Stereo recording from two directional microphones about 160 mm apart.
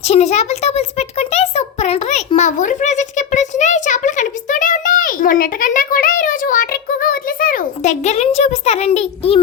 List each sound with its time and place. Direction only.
0.0 s a child's voice: 40° left (ahead or behind)